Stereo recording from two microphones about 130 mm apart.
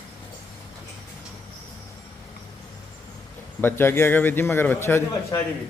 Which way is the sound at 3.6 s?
15° left (ahead or behind).